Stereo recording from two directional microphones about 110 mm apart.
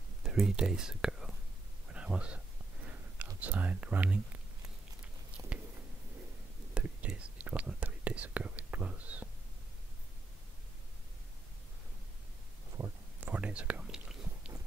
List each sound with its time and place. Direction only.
0.2 s speech: 5° right (ahead or behind)
1.9 s a sound: 10° right (ahead or behind)
3.3 s speech: 15° right (ahead or behind)
6.7 s whispering: 10° right (ahead or behind)
12.8 s a sound: 35° right (ahead or behind)
13.2 s whispering: 10° right (ahead or behind)